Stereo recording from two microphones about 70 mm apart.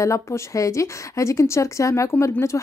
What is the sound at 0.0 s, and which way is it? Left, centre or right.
Speech, left.